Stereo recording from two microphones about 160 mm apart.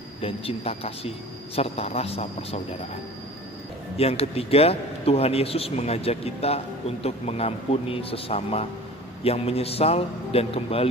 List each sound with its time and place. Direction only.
0.2 s a man's voice: 35° left (ahead or behind)
3.9 s a man's voice: 40° left (ahead or behind)